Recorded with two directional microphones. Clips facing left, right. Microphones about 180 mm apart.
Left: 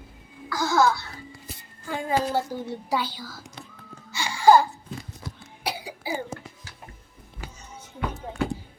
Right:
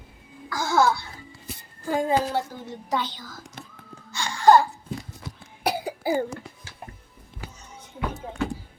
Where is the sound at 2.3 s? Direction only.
5° left (ahead or behind).